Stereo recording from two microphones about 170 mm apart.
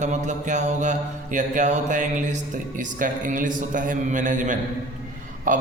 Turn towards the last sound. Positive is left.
turn(degrees=-50)  # may be behind; listen again after turning